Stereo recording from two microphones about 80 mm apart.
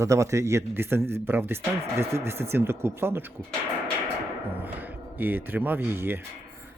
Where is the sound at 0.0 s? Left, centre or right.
Right.